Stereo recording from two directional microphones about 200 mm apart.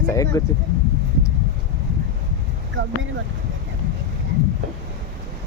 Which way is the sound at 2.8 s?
70° right (ahead or behind).